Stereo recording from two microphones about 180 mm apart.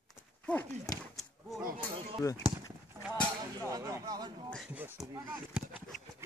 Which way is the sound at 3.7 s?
20° right (ahead or behind).